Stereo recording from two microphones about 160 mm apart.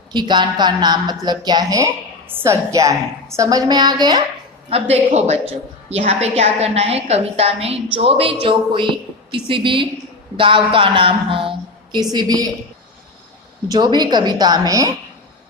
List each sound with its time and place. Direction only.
0.1 s a woman's voice: 30° right (ahead or behind)
4.7 s a woman's voice: 40° right (ahead or behind)
10.3 s a woman's voice: 35° right (ahead or behind)
13.7 s a woman's voice: 25° right (ahead or behind)